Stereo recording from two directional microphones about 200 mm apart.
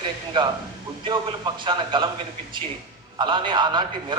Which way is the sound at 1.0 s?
25° right (ahead or behind).